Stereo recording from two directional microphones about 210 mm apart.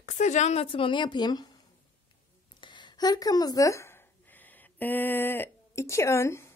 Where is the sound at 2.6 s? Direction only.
20° left (ahead or behind).